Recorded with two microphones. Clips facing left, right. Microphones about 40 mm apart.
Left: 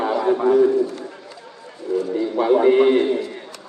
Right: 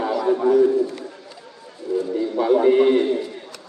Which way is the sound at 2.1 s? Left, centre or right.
Left.